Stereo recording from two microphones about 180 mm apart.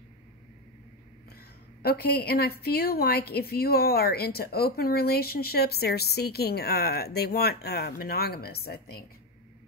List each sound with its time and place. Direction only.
1.8 s a woman's voice: 60° left (ahead or behind)